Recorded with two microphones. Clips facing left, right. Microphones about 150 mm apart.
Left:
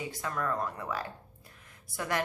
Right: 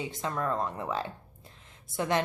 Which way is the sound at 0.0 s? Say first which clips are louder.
Right 2 dB; 25° right (ahead or behind).